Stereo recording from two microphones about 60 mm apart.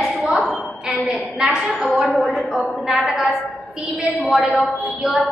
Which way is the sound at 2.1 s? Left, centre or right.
Centre.